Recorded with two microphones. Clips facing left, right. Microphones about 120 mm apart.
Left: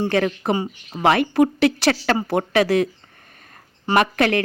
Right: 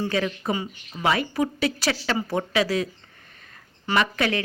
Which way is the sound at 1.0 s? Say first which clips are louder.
Left 7 dB; 60° left (ahead or behind).